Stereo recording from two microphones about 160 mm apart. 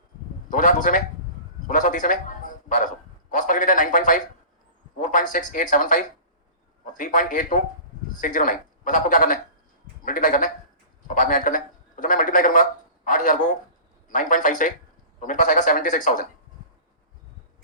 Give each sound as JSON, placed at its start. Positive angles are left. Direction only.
{"t": 0.5, "sound": "a man's voice", "side_deg": 55}